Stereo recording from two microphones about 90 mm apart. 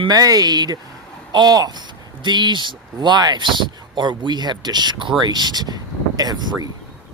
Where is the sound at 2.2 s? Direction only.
55° right (ahead or behind).